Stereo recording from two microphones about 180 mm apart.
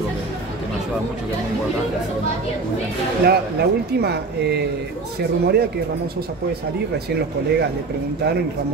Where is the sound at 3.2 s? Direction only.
60° right (ahead or behind).